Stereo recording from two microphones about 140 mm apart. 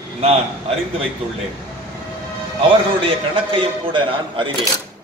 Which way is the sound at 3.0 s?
40° right (ahead or behind).